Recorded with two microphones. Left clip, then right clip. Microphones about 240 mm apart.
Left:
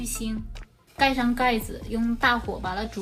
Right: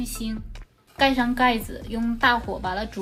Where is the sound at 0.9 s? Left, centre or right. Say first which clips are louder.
Right 2 dB; right.